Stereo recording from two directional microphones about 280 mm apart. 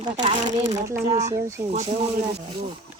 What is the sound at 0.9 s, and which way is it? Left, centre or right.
Speech, centre.